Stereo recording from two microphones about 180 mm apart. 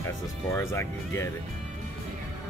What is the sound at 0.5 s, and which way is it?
Speech, 15° left (ahead or behind).